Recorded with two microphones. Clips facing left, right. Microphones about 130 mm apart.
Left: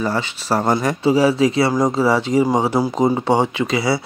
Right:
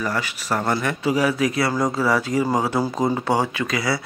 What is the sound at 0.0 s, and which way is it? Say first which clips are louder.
Speech: left 4 dB; 30° left (ahead or behind).